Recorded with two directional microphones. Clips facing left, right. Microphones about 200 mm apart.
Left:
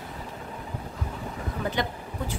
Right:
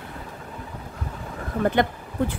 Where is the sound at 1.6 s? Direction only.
55° right (ahead or behind).